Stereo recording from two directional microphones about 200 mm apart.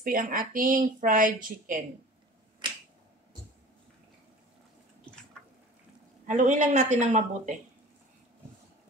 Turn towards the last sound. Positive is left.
turn(degrees=-35)  # may be behind; listen again after turning